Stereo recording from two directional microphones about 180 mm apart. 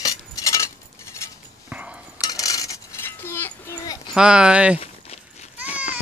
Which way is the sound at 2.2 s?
20° left (ahead or behind).